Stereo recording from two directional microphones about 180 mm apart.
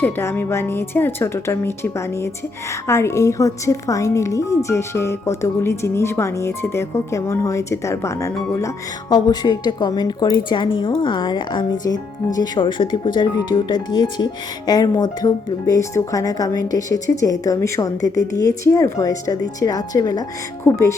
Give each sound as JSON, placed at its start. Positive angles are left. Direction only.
{"t": 0.0, "sound": "a woman's voice", "side_deg": 10}